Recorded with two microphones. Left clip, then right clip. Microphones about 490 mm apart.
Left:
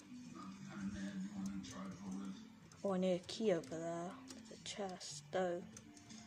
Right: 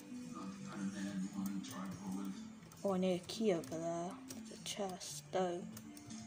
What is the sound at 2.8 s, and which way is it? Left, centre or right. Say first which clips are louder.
Speech: right 1 dB; left.